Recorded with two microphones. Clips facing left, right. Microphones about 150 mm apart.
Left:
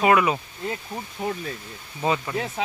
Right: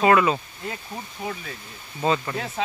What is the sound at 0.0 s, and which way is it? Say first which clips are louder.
Speech: right 1 dB; 15° left (ahead or behind).